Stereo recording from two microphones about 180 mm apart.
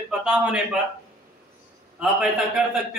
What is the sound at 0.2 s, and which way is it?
Speech, 5° right (ahead or behind).